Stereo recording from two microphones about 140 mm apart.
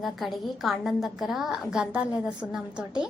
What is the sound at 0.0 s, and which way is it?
A woman's voice, centre (ahead or behind).